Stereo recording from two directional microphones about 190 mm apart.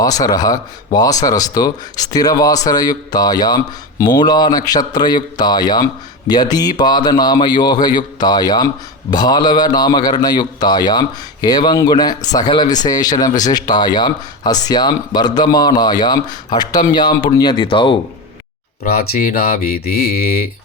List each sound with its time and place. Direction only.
0.0 s speech: 20° left (ahead or behind)
18.8 s speech: 50° left (ahead or behind)